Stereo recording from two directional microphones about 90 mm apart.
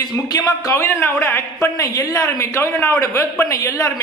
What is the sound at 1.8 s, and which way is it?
A man's voice, 40° left (ahead or behind).